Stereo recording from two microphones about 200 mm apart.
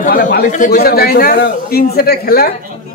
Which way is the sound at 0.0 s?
40° left (ahead or behind).